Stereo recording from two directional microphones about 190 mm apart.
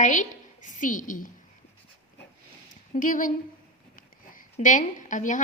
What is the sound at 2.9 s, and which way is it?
Speech, 45° left (ahead or behind).